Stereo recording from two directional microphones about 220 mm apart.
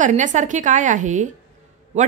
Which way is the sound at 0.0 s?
35° right (ahead or behind).